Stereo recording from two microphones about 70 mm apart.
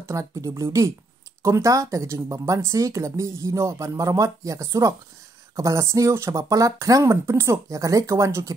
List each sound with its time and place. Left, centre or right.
0.0 s speech: right
6.5 s speech: right
7.0 s speech: right